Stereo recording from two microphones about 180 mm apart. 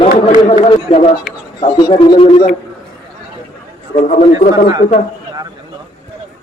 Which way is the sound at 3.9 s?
40° left (ahead or behind).